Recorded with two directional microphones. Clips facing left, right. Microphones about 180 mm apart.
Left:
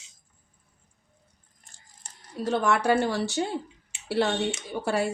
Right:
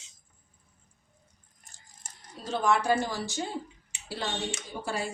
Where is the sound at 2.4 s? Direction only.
65° left (ahead or behind).